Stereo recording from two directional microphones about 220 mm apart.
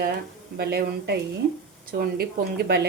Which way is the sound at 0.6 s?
45° right (ahead or behind).